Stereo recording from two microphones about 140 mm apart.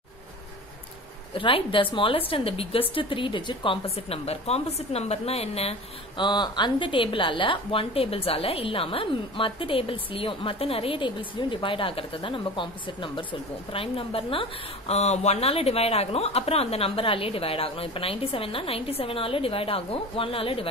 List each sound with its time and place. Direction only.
1.3 s a woman's voice: 40° left (ahead or behind)
6.2 s a woman's voice: 30° left (ahead or behind)